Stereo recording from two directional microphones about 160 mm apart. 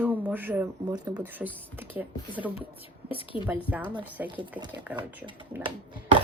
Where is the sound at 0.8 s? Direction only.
25° right (ahead or behind).